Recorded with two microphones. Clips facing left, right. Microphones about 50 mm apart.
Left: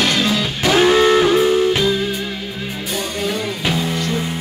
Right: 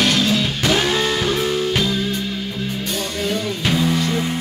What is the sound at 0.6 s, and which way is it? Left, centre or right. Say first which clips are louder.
Music: left 9 dB; left.